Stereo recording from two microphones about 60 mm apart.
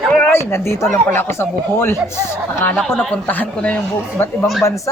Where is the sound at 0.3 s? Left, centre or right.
Left.